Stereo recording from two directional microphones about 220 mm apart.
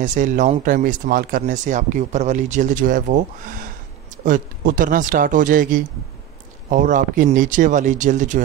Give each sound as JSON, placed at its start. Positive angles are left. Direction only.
{"t": 0.0, "sound": "speech", "side_deg": -35}